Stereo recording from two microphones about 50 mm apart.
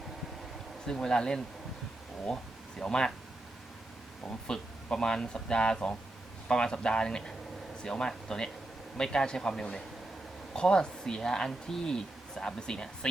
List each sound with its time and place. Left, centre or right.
0.9 s speech: centre
2.3 s speech: centre
2.8 s speech: centre
4.3 s speech: centre